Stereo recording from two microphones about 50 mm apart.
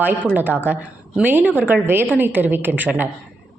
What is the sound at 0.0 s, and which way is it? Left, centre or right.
A woman's voice, right.